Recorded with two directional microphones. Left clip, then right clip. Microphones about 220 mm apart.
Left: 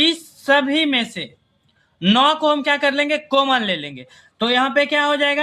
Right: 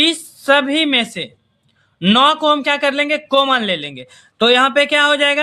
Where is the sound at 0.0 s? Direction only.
30° right (ahead or behind).